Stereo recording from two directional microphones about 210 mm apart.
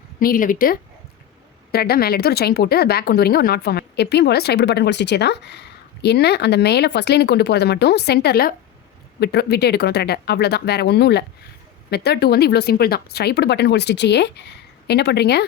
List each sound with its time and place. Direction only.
0.2 s speech: 40° left (ahead or behind)